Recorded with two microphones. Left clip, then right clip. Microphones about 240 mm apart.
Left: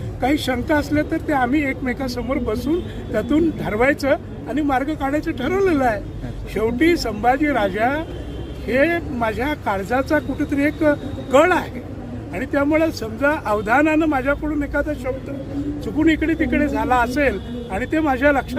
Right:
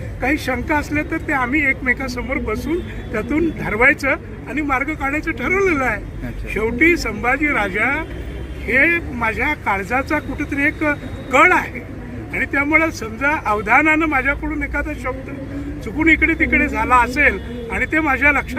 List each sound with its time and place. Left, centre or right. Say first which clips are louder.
0.2 s speech: even; left